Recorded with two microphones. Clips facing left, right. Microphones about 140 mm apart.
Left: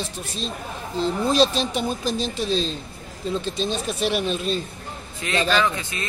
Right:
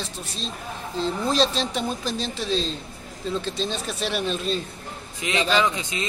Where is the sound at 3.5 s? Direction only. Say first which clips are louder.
Left 3 dB; 10° left (ahead or behind).